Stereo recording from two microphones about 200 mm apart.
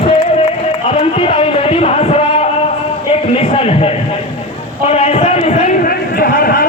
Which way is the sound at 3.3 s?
30° left (ahead or behind).